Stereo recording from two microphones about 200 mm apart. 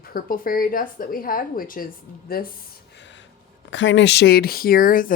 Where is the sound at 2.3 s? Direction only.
50° left (ahead or behind).